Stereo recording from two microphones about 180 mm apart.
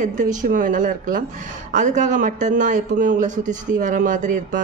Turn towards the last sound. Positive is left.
turn(degrees=-45)  # may be behind; listen again after turning